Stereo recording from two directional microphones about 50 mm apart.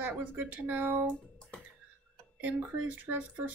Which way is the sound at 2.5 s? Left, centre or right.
Right.